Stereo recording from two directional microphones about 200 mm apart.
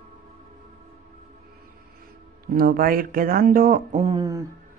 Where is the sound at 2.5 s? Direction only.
45° right (ahead or behind).